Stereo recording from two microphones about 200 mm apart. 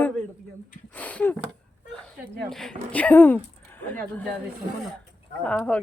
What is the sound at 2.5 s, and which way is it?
Speech, centre (ahead or behind).